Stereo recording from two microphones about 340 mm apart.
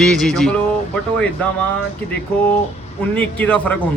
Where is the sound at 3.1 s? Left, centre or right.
Centre.